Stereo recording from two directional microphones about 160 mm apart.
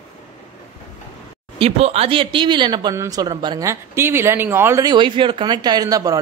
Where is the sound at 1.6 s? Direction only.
40° right (ahead or behind); by 4.9 s 15° right (ahead or behind).